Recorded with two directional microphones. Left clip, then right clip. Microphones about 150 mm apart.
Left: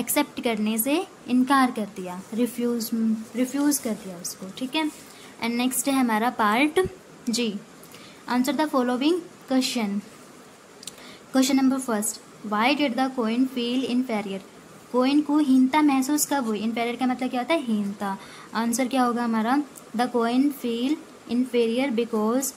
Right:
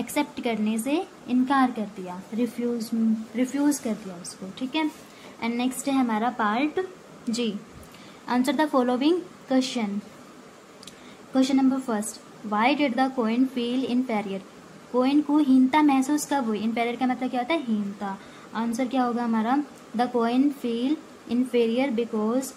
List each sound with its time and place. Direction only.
0.0 s a woman's voice: 15° left (ahead or behind)
7.2 s a woman's voice: 10° left (ahead or behind)
11.3 s a woman's voice: 15° left (ahead or behind)